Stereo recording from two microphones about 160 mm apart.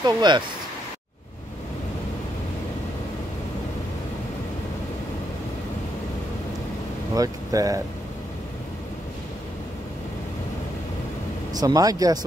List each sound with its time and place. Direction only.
0.0 s speech: 25° right (ahead or behind)
7.2 s speech: 20° right (ahead or behind)
11.5 s speech: 25° right (ahead or behind)